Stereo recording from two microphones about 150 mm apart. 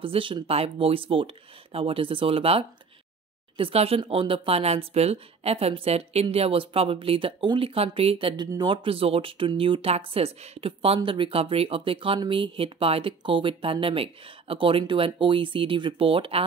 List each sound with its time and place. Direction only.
0.0 s speech: 35° right (ahead or behind)